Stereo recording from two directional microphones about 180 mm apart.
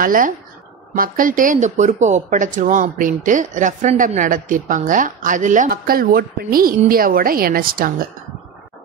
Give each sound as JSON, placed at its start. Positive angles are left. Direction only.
{"t": 0.0, "sound": "speech", "side_deg": -50}